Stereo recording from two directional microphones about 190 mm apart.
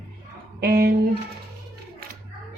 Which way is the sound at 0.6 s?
55° right (ahead or behind).